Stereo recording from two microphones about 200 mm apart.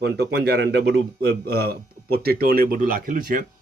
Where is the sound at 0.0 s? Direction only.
55° right (ahead or behind).